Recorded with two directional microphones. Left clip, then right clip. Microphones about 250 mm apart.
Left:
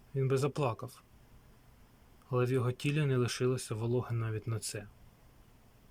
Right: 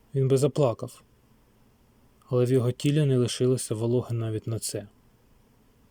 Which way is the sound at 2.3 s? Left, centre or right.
Centre.